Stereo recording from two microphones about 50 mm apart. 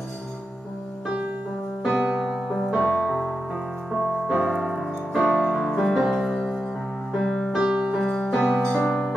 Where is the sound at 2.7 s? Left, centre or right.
Centre.